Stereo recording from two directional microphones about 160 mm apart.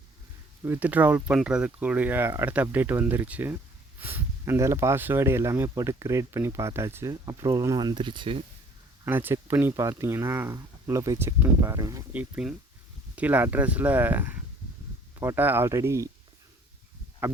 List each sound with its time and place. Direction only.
0.6 s speech: 10° right (ahead or behind); by 8.4 s 30° right (ahead or behind)
9.0 s speech: 10° right (ahead or behind)
17.2 s a sound: 10° right (ahead or behind)